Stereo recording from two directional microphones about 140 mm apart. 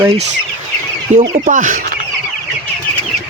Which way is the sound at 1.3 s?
65° right (ahead or behind).